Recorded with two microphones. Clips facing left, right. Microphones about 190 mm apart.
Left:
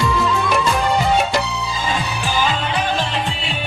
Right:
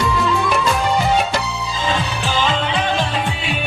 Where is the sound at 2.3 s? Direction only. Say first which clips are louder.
Right 1 dB; 10° left (ahead or behind).